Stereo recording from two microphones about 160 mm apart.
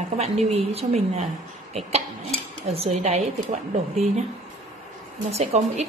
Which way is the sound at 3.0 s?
45° right (ahead or behind).